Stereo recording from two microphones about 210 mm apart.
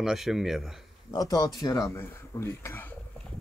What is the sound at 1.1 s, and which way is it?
Speech, 20° left (ahead or behind).